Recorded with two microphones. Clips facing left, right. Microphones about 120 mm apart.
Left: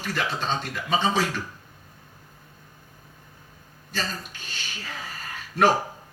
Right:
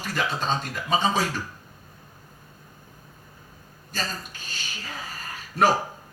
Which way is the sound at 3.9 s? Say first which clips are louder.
Left 1 dB; 40° right (ahead or behind).